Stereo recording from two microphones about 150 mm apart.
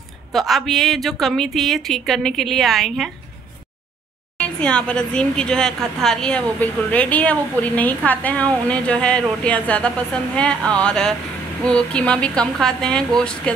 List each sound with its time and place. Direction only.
0.3 s a woman's voice: centre (ahead or behind)
4.4 s speech: 5° left (ahead or behind)